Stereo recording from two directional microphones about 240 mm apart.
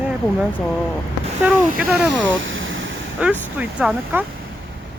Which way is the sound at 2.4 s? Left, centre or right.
Right.